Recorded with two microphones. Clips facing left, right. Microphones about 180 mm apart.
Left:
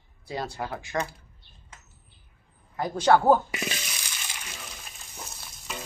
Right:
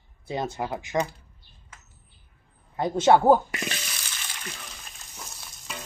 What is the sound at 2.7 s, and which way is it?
Speech, 25° right (ahead or behind).